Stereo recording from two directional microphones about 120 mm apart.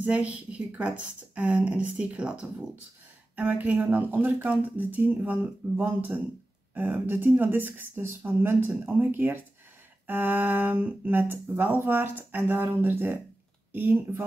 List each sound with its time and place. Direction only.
0.0 s speech: 10° right (ahead or behind)